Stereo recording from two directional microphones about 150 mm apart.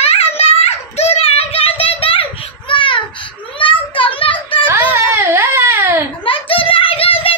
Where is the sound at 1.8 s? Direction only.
40° left (ahead or behind).